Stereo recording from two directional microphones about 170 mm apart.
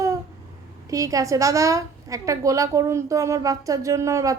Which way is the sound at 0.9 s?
20° right (ahead or behind).